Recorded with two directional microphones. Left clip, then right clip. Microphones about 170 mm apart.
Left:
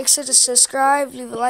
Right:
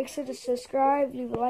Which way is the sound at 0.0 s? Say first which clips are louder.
Left 13 dB; 20° left (ahead or behind).